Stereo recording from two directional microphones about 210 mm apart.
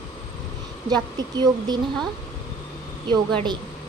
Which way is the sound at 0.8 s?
20° right (ahead or behind).